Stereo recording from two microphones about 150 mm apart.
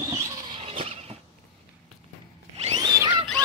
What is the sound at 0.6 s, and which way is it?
Vehicle, 40° right (ahead or behind).